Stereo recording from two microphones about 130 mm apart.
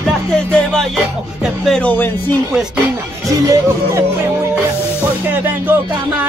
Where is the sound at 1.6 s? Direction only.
5° left (ahead or behind).